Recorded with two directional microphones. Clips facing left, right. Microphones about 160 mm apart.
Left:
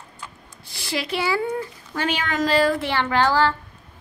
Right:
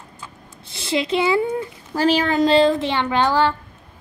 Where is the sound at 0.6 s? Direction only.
20° right (ahead or behind).